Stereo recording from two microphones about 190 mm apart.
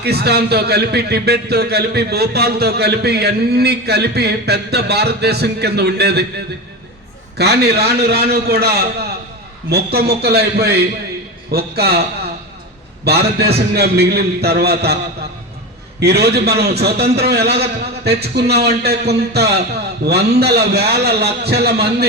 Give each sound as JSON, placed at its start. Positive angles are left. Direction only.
{"t": 0.0, "sound": "a man's voice", "side_deg": -60}
{"t": 7.3, "sound": "a man's voice", "side_deg": -60}
{"t": 13.1, "sound": "a man's voice", "side_deg": -60}
{"t": 16.0, "sound": "a man's voice", "side_deg": -60}